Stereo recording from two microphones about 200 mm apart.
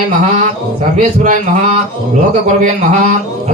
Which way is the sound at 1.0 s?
35° right (ahead or behind).